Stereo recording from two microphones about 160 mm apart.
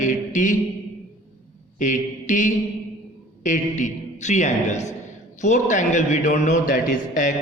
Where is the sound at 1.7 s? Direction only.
50° left (ahead or behind).